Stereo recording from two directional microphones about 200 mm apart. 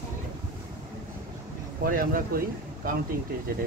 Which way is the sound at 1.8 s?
45° right (ahead or behind).